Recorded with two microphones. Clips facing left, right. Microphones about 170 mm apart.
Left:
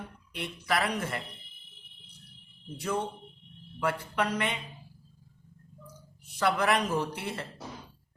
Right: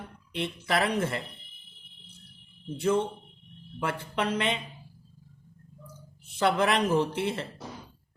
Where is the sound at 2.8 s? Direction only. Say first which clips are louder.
Right 6 dB; 25° right (ahead or behind).